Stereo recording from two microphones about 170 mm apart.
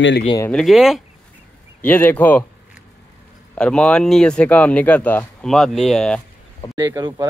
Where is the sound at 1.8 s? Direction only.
10° left (ahead or behind).